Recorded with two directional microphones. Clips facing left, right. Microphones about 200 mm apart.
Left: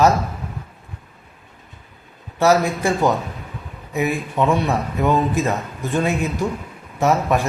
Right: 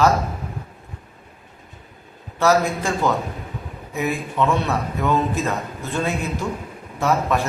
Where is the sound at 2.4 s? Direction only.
15° left (ahead or behind).